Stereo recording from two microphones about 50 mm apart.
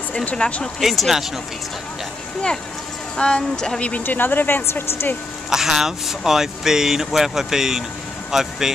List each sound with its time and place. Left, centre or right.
0.4 s speech: left
0.7 s speech: centre
3.2 s a woman's voice: centre
4.0 s speech: left
5.5 s speech: centre